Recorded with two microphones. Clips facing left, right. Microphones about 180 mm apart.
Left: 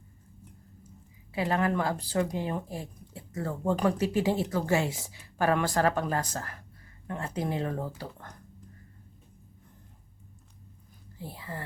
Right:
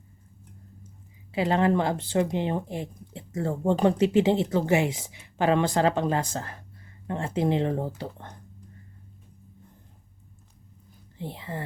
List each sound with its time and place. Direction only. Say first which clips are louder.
1.3 s speech: right 5 dB; 25° right (ahead or behind)
11.2 s speech: right 5 dB; 20° right (ahead or behind)